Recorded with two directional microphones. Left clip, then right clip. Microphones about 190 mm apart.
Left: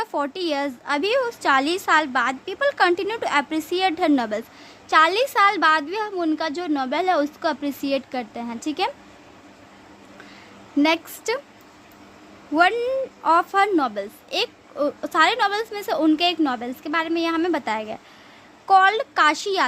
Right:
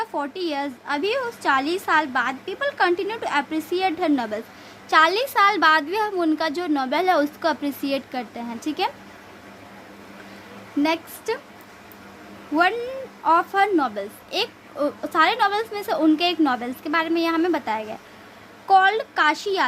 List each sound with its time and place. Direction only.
0.0 s a woman's voice: 25° left (ahead or behind)
10.8 s a woman's voice: 25° left (ahead or behind)
12.5 s a woman's voice: 25° left (ahead or behind)